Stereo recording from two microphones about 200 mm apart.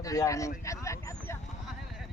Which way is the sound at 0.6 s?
15° left (ahead or behind).